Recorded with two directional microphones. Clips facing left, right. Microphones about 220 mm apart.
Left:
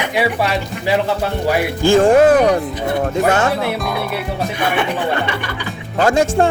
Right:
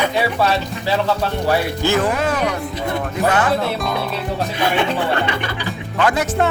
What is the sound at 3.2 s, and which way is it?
Speech, 25° left (ahead or behind).